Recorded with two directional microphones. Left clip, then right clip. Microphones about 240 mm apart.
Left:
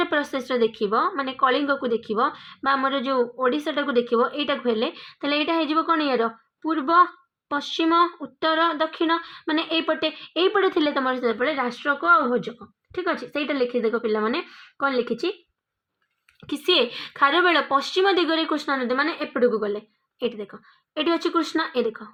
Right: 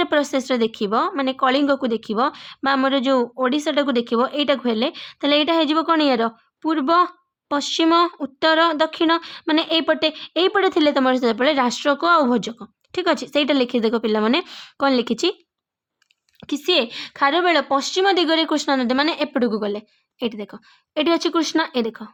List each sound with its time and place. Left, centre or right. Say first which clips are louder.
0.0 s a woman's voice: right 4 dB; right
11.8 s speech: left 1 dB; right
16.4 s speech: right 1 dB; right